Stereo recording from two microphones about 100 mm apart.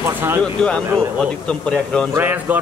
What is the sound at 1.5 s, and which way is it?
Speech, 10° left (ahead or behind).